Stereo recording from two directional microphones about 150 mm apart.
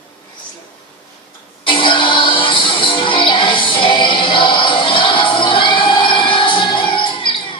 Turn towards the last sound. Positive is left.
turn(degrees=35)  # may be behind; listen again after turning